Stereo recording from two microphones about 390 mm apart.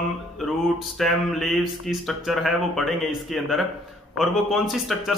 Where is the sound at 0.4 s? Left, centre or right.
Centre.